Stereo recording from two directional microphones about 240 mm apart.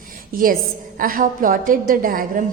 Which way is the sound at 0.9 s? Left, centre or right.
Right.